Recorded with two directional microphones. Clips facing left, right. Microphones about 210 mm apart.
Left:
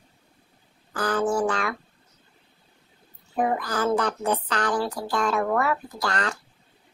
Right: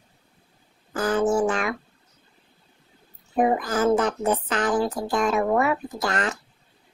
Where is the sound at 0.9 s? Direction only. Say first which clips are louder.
Right 3 dB; 25° right (ahead or behind).